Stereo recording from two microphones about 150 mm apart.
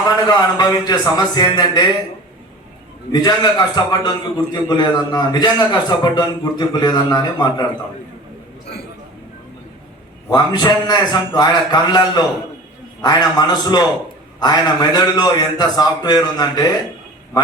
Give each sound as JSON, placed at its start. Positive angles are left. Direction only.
{"t": 0.2, "sound": "a man's voice", "side_deg": 25}
{"t": 3.1, "sound": "a man's voice", "side_deg": 25}
{"t": 10.2, "sound": "a man's voice", "side_deg": 25}